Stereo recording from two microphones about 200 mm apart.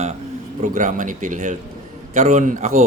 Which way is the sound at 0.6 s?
35° right (ahead or behind).